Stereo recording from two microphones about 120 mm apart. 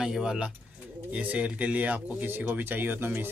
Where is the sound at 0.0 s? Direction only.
5° right (ahead or behind).